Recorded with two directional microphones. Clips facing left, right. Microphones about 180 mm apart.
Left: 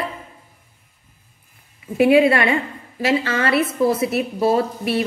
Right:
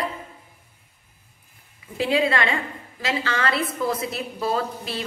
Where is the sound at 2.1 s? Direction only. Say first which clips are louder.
Left 6 dB; 25° left (ahead or behind).